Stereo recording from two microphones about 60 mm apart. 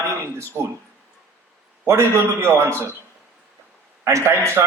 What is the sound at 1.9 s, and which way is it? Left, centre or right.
Speech, right.